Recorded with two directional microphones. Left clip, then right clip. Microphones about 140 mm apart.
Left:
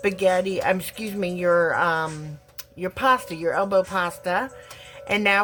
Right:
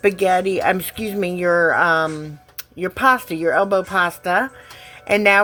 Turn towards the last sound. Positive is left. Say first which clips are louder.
# right 6 dB
turn(degrees=-30)  # may be behind; listen again after turning